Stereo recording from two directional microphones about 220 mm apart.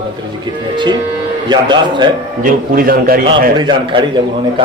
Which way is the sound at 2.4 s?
40° right (ahead or behind).